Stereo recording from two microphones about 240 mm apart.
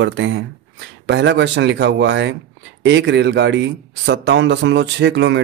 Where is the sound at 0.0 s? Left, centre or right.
Right.